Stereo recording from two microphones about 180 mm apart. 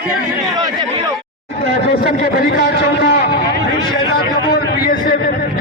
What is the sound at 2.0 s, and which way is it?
A man's voice, 55° left (ahead or behind).